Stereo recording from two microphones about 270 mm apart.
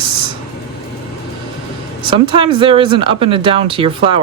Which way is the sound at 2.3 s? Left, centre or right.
Centre.